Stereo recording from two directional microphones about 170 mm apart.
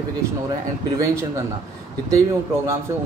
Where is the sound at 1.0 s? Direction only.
15° right (ahead or behind).